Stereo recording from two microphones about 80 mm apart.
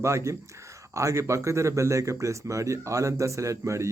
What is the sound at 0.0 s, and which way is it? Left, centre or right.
Speech, right.